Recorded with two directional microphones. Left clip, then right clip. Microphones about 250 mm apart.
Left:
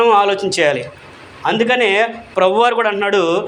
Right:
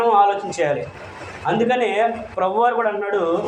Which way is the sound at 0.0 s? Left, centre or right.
Left.